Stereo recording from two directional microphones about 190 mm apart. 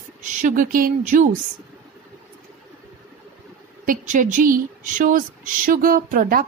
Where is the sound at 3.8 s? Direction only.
45° right (ahead or behind).